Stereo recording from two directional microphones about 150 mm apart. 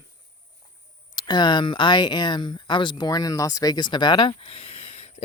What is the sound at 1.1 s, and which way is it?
Speech, 30° left (ahead or behind).